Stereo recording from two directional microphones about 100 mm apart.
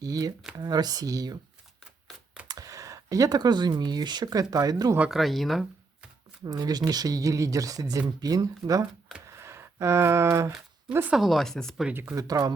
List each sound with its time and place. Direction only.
0.0 s speech: 40° right (ahead or behind)
2.5 s speech: 35° right (ahead or behind)
4.9 s speech: 5° right (ahead or behind)
6.4 s speech: 40° right (ahead or behind)
9.3 s a sound: 25° right (ahead or behind)
11.1 s speech: centre (ahead or behind)
11.9 s speech: 15° right (ahead or behind)
12.1 s speech: 35° right (ahead or behind)